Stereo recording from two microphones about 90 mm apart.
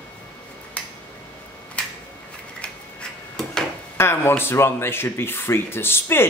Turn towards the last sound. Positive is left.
turn(degrees=25)  # may be behind; listen again after turning